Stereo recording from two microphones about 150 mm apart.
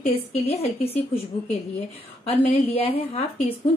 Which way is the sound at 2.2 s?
45° left (ahead or behind).